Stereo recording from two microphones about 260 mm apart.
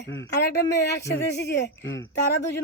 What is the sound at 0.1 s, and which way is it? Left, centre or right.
A woman's voice, left.